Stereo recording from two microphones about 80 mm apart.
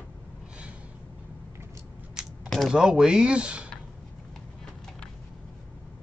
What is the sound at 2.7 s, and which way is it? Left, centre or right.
Speech, centre.